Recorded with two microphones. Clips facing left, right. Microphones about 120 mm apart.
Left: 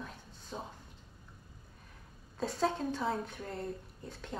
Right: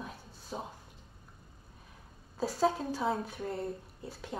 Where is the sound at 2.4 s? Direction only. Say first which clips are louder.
Right 3 dB; 5° right (ahead or behind).